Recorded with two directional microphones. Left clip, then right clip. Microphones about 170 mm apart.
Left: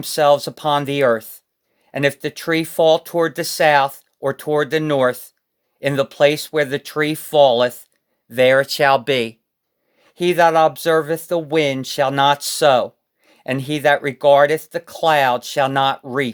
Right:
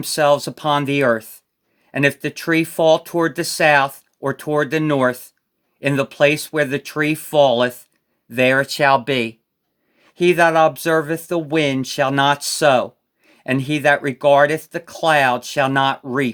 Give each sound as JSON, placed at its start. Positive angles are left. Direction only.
{"t": 0.0, "sound": "speech", "side_deg": 25}